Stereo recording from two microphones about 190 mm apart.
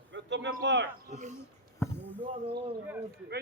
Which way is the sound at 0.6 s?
65° right (ahead or behind).